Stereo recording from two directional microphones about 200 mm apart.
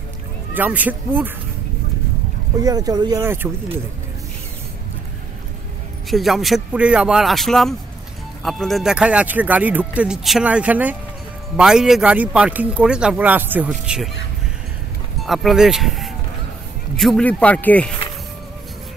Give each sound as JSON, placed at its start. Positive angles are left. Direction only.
{"t": 0.6, "sound": "speech", "side_deg": -10}
{"t": 2.6, "sound": "speech", "side_deg": -20}
{"t": 6.0, "sound": "speech", "side_deg": 0}
{"t": 15.2, "sound": "speech", "side_deg": 0}